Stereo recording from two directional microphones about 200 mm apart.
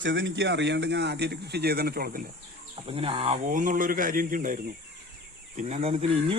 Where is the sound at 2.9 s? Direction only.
30° right (ahead or behind).